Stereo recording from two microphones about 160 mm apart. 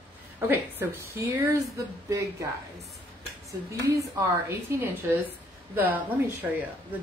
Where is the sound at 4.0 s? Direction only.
15° right (ahead or behind).